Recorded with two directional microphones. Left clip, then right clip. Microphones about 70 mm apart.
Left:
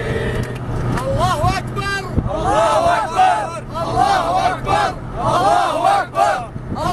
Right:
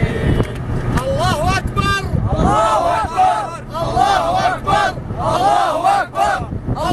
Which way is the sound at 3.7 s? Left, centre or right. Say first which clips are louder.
Right 1 dB; right.